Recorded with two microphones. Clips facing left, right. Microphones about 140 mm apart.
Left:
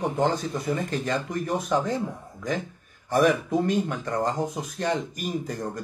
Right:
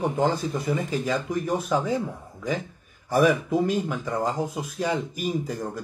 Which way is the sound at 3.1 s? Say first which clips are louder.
Right 1 dB; 10° right (ahead or behind).